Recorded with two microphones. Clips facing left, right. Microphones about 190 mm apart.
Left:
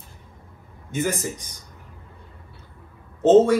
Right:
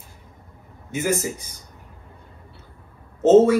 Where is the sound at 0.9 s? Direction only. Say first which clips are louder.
Right 2 dB; 5° right (ahead or behind).